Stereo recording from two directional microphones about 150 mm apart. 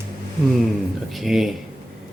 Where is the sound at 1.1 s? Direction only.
Centre (ahead or behind).